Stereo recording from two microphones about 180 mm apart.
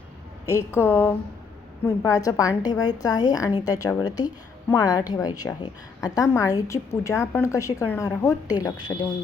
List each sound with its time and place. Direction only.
0.4 s a woman's voice: 15° left (ahead or behind)